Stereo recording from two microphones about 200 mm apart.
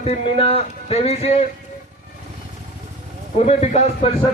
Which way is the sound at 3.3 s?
35° left (ahead or behind).